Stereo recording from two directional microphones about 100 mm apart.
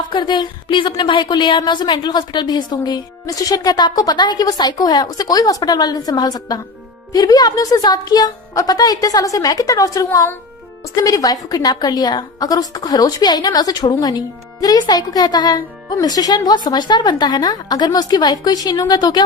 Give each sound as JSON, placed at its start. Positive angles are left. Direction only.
{"t": 0.1, "sound": "a woman's voice", "side_deg": 50}